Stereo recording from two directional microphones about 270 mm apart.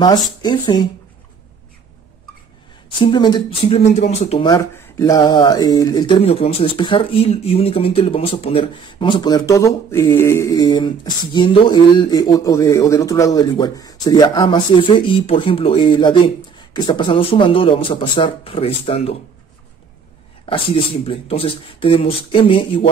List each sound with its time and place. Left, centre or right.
0.4 s speech: centre
3.0 s speech: centre
20.4 s speech: centre